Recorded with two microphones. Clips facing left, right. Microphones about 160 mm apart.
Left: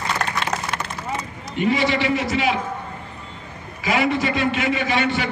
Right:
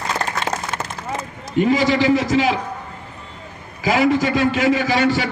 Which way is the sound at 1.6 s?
40° right (ahead or behind).